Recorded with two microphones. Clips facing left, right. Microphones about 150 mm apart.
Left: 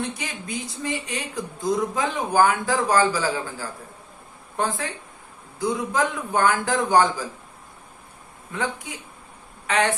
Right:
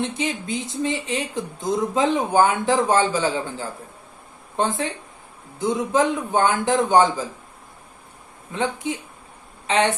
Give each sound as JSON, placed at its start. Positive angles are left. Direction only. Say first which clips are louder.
{"t": 0.0, "sound": "speech", "louder": "right 5 dB", "side_deg": -25}
{"t": 8.5, "sound": "speech", "louder": "right 4 dB", "side_deg": -25}